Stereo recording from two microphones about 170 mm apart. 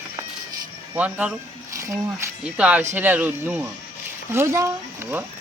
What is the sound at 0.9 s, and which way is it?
Speech, 10° right (ahead or behind).